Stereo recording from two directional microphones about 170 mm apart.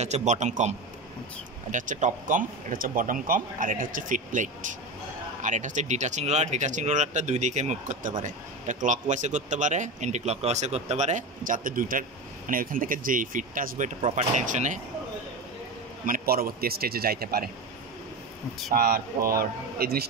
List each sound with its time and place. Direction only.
0.0 s speech: 40° right (ahead or behind)
16.1 s a man's voice: 60° right (ahead or behind)
18.7 s a man's voice: 60° right (ahead or behind)